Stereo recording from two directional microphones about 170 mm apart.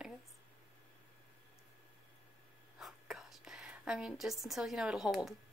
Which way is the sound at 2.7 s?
Centre (ahead or behind).